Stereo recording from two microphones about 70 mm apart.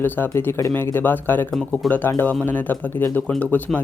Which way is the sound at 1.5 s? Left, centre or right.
Centre.